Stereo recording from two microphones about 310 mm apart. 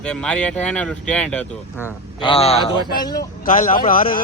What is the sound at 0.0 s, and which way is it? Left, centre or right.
Speech, centre.